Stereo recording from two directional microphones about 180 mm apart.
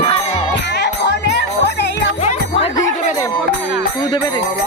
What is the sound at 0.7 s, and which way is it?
Music, 75° left (ahead or behind).